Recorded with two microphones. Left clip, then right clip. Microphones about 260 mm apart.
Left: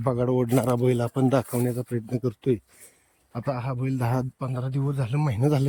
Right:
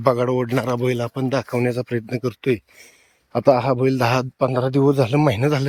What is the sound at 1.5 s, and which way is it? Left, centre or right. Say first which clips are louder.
Speech: right 7 dB; right.